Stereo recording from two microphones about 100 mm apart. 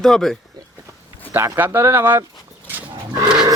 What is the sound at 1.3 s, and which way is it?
Speech, 25° right (ahead or behind).